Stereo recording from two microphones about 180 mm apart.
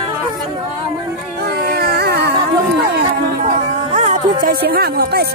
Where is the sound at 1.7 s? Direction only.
60° right (ahead or behind).